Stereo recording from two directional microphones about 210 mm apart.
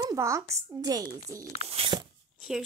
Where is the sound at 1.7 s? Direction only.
25° right (ahead or behind).